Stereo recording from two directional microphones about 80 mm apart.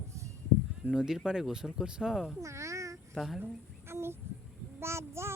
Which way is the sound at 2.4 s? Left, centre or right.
Right.